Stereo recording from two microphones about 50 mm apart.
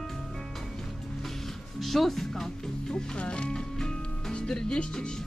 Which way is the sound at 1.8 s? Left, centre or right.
Centre.